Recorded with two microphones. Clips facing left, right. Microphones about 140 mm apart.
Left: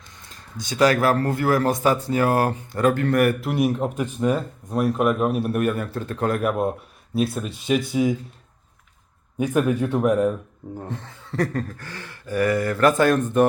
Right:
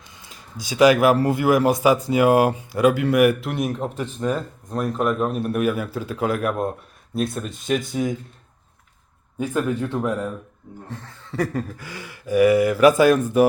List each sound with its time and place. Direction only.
0.2 s speech: 10° right (ahead or behind)
3.5 s speech: 5° left (ahead or behind)
9.4 s speech: 20° left (ahead or behind)
11.3 s speech: 5° right (ahead or behind)